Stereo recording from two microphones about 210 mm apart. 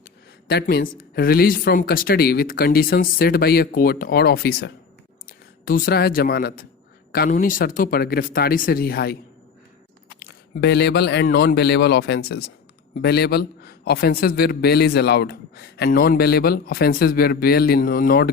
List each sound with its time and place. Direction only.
0.4 s a man's voice: 45° left (ahead or behind)
10.2 s a man's voice: 50° left (ahead or behind)